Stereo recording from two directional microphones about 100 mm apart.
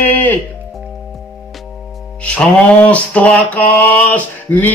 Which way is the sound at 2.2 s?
10° left (ahead or behind).